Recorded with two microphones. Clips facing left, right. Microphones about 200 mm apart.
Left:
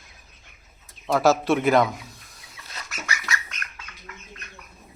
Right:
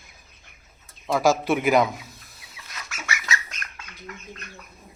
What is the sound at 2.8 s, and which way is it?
Bird, centre (ahead or behind).